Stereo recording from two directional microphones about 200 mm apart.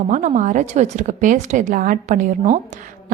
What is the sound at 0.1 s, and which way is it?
A woman's voice, 40° right (ahead or behind).